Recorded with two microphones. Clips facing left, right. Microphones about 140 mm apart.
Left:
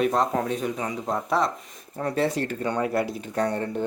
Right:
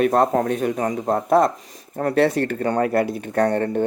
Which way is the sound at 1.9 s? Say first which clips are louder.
Right 6 dB; 65° right (ahead or behind).